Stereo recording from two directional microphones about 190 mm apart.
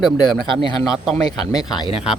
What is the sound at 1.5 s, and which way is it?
Speech, 20° left (ahead or behind).